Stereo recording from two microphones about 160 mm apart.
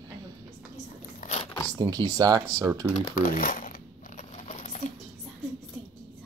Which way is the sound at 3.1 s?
60° left (ahead or behind).